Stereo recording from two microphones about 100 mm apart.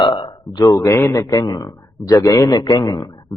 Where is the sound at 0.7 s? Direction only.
30° left (ahead or behind).